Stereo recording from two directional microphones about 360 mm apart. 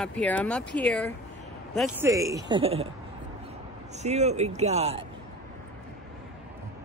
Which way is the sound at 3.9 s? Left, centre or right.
Centre.